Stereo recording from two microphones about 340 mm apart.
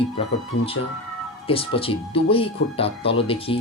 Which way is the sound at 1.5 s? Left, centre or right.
Centre.